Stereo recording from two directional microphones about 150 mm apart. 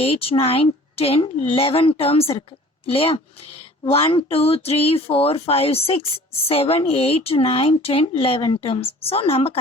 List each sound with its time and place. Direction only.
0.0 s speech: 40° left (ahead or behind)